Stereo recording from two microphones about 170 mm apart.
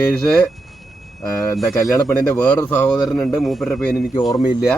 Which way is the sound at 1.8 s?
20° left (ahead or behind).